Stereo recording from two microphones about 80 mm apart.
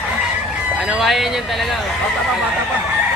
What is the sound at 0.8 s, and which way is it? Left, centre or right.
Speech, centre.